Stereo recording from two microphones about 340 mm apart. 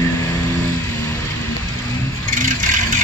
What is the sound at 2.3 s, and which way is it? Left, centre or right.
Vehicle, right.